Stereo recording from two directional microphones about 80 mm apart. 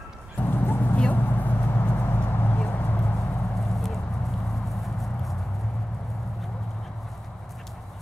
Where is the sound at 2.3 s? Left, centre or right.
Left.